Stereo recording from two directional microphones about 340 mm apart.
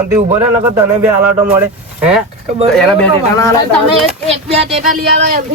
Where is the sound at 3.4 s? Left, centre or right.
Centre.